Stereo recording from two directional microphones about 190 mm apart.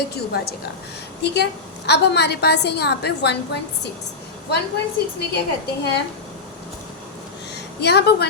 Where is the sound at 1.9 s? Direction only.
60° left (ahead or behind).